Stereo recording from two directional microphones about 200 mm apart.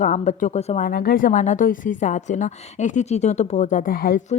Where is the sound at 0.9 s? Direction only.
50° left (ahead or behind).